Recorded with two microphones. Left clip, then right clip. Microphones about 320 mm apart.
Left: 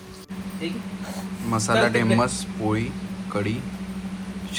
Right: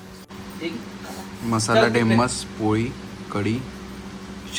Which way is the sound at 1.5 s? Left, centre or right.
Centre.